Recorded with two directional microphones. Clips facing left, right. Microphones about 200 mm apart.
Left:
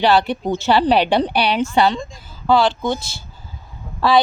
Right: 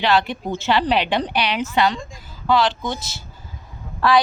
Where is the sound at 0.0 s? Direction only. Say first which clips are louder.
Left 4 dB; 35° left (ahead or behind).